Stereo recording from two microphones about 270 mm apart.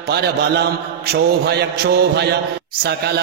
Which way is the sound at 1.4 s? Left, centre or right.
Right.